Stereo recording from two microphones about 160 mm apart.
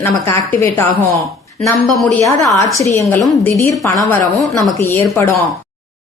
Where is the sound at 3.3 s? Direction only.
15° left (ahead or behind).